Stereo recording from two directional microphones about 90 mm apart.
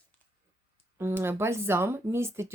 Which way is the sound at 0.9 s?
30° right (ahead or behind).